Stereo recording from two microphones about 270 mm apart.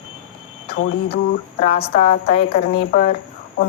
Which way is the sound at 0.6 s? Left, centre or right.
Left.